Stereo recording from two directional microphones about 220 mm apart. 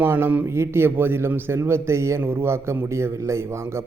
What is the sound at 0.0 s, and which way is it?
A man's voice, 10° right (ahead or behind).